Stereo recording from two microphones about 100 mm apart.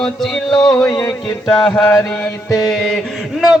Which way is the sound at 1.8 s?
30° left (ahead or behind).